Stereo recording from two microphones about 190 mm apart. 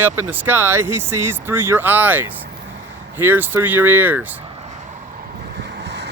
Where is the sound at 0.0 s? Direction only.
10° right (ahead or behind).